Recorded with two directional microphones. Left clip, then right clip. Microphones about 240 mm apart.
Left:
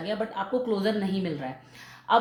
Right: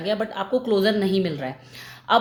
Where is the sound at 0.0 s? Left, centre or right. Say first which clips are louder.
Right 5 dB; right.